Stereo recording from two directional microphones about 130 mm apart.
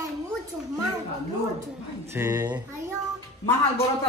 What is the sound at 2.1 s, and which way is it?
Speech, 25° right (ahead or behind).